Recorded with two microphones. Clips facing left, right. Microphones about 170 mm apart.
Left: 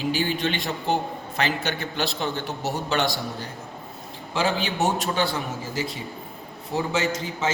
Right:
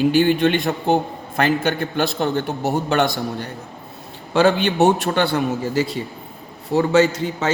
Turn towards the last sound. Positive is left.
turn(degrees=-65)  # may be behind; listen again after turning